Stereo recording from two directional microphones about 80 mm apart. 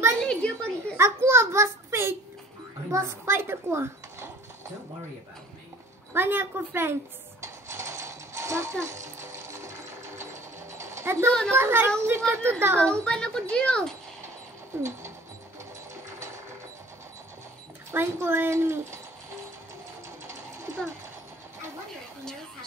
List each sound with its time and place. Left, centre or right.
0.2 s a sound: centre
0.9 s a sound: right
6.1 s a woman's voice: right
7.4 s mechanisms: right
11.2 s a child's voice: centre
11.5 s a woman's voice: right
12.8 s a child's voice: centre
14.8 s mechanisms: right
17.9 s a woman's voice: right